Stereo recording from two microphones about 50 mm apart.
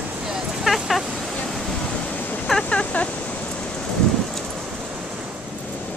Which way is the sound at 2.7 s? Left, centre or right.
Left.